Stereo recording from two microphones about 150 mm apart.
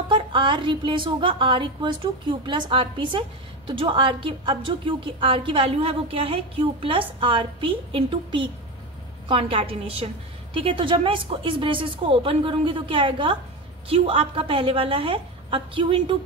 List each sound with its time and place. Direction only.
0.1 s a woman's voice: 35° right (ahead or behind)